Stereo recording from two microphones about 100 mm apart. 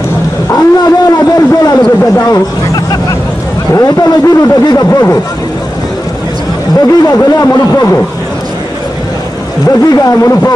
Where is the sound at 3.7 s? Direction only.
35° left (ahead or behind).